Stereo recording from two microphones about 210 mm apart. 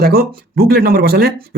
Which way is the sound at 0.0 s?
45° right (ahead or behind).